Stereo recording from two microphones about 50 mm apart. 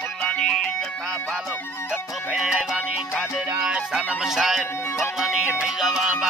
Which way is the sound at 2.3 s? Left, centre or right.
Centre.